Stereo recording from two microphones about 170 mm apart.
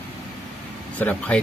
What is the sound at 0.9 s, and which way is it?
Speech, 10° left (ahead or behind).